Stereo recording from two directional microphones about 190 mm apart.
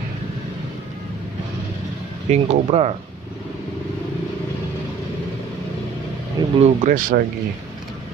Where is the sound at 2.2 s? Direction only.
35° right (ahead or behind).